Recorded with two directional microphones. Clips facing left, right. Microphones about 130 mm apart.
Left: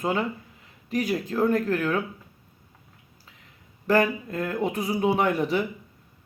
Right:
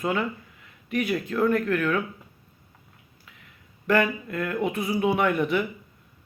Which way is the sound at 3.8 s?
35° left (ahead or behind).